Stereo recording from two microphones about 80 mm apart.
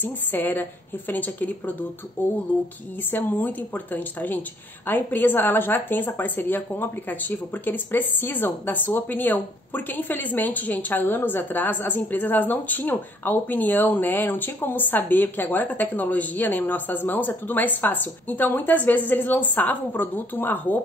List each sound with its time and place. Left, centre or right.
0.0 s a woman's voice: left